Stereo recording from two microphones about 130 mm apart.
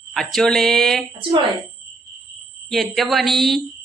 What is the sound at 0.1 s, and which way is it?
Speech, centre (ahead or behind).